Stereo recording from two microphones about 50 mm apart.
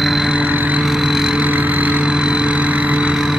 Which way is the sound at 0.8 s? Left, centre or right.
Centre.